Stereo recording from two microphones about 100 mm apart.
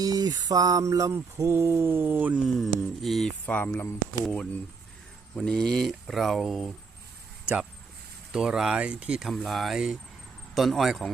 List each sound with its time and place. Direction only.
0.0 s music: 40° right (ahead or behind); by 2.4 s 20° right (ahead or behind)
2.5 s speech: centre (ahead or behind)
3.4 s speech: 15° left (ahead or behind)
7.4 s a sound: 10° right (ahead or behind)
8.3 s speech: 5° right (ahead or behind)